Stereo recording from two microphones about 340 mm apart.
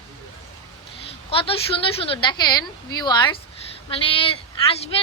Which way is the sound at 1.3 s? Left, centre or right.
Centre.